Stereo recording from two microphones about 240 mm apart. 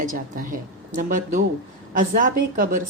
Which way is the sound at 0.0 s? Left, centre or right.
Right.